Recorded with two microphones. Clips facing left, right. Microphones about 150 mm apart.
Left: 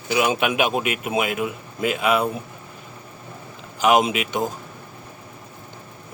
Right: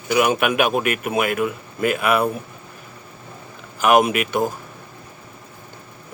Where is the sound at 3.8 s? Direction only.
55° right (ahead or behind).